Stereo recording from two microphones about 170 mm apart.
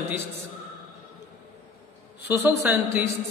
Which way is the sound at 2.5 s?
15° right (ahead or behind).